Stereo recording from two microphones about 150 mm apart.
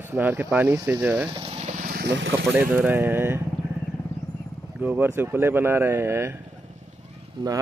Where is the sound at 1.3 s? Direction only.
40° right (ahead or behind); by 2.1 s 65° right (ahead or behind).